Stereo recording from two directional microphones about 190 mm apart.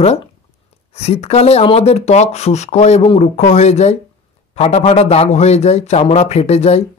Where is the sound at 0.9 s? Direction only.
35° left (ahead or behind).